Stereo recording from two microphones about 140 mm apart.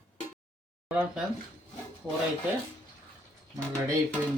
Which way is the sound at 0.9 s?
10° right (ahead or behind).